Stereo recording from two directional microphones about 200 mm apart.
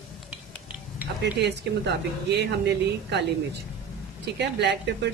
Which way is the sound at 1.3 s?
55° right (ahead or behind).